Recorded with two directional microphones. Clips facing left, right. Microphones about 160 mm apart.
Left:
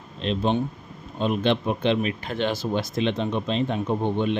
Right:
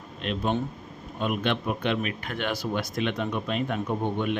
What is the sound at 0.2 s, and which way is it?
Speech, 30° left (ahead or behind).